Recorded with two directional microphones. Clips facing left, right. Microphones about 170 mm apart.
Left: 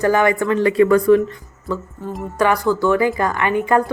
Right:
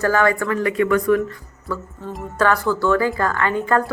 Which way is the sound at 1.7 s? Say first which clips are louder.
Left 3 dB; 20° left (ahead or behind).